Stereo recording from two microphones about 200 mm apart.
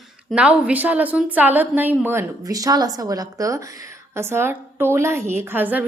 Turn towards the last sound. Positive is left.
turn(degrees=-10)  # may be behind; listen again after turning